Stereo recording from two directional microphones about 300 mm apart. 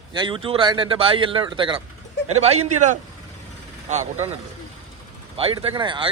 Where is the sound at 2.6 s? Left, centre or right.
Right.